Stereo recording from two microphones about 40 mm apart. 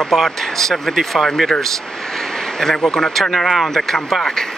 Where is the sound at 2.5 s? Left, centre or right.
Centre.